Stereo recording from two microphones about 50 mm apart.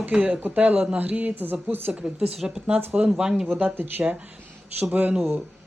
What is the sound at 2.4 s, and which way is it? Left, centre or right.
Speech, right.